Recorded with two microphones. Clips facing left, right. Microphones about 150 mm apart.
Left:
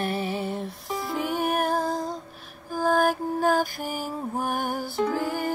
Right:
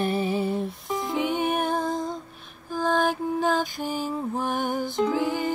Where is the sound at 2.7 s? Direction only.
5° left (ahead or behind).